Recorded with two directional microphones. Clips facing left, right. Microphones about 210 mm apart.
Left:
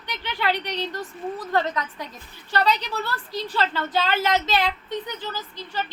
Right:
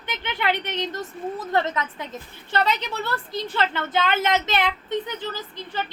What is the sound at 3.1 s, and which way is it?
A woman's voice, 20° right (ahead or behind).